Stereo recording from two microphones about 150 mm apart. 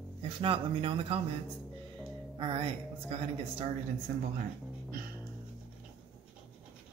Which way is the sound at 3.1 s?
40° right (ahead or behind).